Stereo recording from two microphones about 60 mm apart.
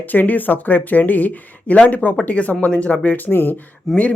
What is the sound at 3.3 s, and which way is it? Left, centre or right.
Speech, left.